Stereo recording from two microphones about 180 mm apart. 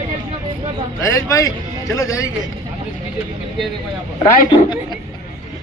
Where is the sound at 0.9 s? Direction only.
20° left (ahead or behind).